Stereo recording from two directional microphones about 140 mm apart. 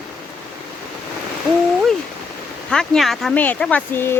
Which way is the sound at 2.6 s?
5° left (ahead or behind).